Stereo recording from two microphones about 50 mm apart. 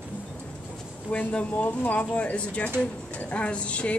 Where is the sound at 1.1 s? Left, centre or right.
Left.